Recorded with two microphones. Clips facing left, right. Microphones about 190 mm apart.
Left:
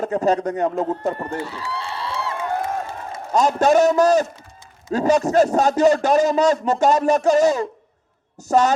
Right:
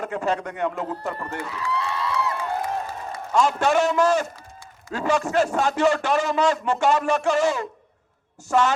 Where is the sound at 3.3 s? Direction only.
40° left (ahead or behind).